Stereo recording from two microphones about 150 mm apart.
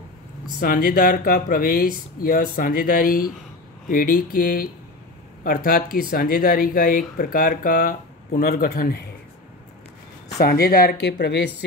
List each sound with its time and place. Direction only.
0.6 s speech: 75° left (ahead or behind)
10.4 s speech: 85° left